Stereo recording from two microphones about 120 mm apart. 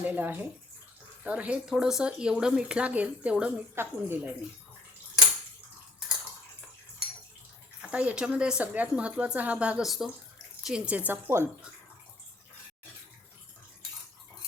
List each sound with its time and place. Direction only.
0.0 s speech: 15° right (ahead or behind)
7.8 s speech: 10° right (ahead or behind)